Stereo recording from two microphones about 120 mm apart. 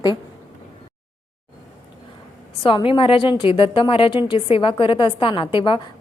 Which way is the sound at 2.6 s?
45° left (ahead or behind).